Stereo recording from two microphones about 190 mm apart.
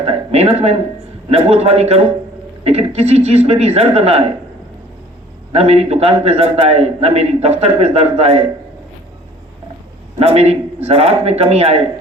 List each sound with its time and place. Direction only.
0.0 s a man's voice: 30° right (ahead or behind)
5.5 s a man's voice: 30° right (ahead or behind)
10.2 s a man's voice: 35° right (ahead or behind)